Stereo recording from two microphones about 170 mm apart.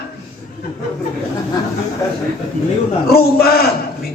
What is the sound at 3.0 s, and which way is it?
Speech, 65° left (ahead or behind).